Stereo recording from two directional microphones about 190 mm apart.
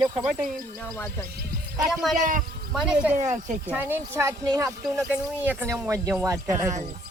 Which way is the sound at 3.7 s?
10° right (ahead or behind).